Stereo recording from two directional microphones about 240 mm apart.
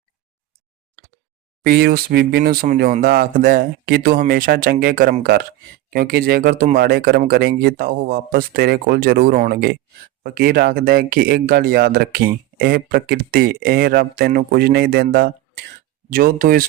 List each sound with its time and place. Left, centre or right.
1.6 s speech: right